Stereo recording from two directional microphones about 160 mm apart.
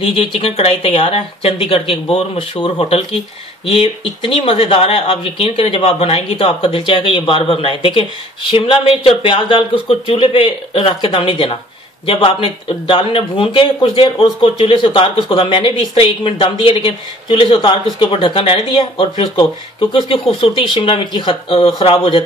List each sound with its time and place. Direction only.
0.0 s speech: 35° left (ahead or behind)